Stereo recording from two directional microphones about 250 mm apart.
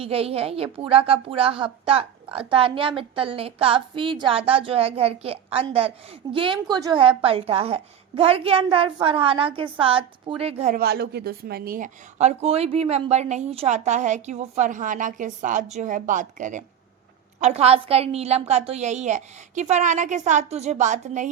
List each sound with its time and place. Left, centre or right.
0.0 s a woman's voice: right